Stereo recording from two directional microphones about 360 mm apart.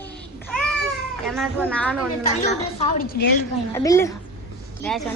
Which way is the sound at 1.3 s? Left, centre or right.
Centre.